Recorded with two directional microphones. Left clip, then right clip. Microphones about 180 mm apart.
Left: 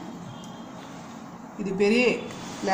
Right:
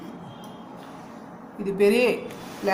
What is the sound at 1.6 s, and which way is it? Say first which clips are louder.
Speech: right 2 dB; 15° right (ahead or behind).